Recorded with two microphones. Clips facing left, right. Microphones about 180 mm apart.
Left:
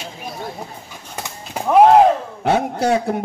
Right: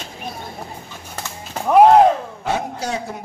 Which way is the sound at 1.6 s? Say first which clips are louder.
Left 1 dB; 10° left (ahead or behind).